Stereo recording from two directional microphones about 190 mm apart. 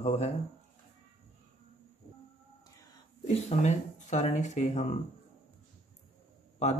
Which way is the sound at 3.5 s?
40° left (ahead or behind).